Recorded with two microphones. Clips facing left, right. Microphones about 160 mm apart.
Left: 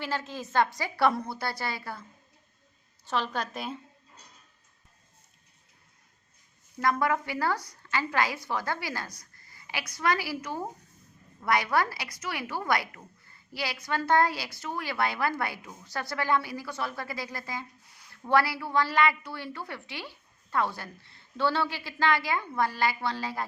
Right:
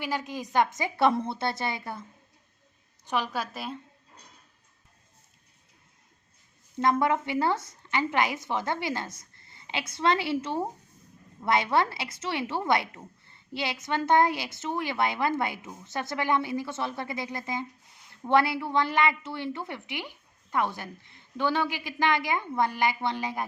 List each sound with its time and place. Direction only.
0.0 s a woman's voice: 15° right (ahead or behind)
3.1 s a woman's voice: 10° right (ahead or behind)
6.7 s a woman's voice: 25° right (ahead or behind)